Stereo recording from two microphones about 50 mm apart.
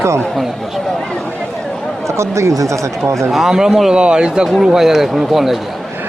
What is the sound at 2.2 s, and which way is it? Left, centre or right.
Speech, right.